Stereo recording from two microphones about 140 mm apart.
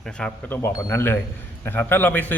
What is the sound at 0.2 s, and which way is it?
A man's voice, 15° left (ahead or behind).